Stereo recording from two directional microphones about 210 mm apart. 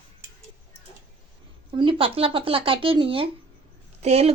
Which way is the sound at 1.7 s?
25° right (ahead or behind).